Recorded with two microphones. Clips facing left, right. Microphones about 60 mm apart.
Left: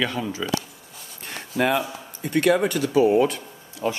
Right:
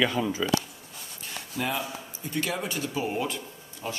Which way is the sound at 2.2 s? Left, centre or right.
Left.